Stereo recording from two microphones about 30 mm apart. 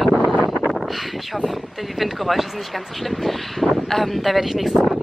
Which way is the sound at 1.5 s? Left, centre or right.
Centre.